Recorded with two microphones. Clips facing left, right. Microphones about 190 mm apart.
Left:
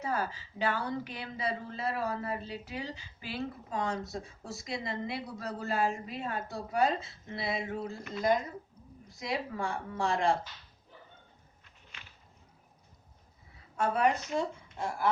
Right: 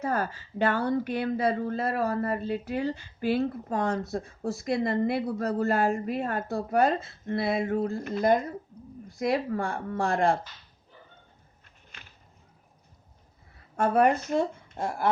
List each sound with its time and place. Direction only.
0.0 s a woman's voice: 55° right (ahead or behind)
13.7 s a woman's voice: 55° right (ahead or behind)